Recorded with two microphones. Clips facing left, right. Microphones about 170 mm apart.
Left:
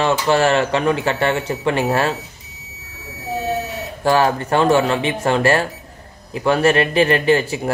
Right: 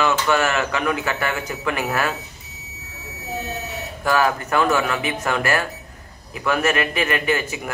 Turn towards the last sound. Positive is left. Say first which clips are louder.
# left 7 dB
turn(degrees=30)  # may be behind; listen again after turning